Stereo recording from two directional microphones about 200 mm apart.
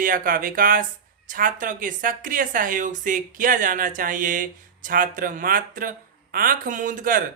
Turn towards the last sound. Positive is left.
turn(degrees=-40)  # may be behind; listen again after turning